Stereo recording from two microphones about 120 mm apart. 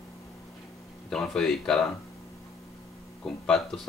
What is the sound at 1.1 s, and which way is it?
Speech, 5° left (ahead or behind).